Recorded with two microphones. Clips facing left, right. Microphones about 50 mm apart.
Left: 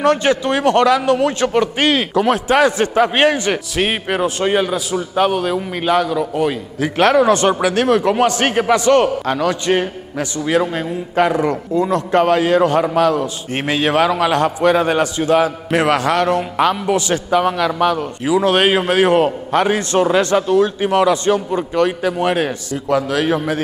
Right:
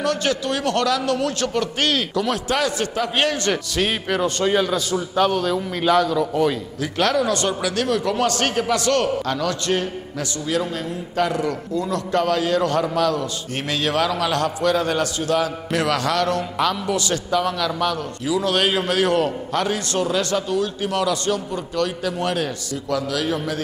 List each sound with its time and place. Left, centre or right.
0.0 s a man's voice: left
3.3 s a man's voice: centre
3.8 s a man's voice: left
6.8 s a man's voice: left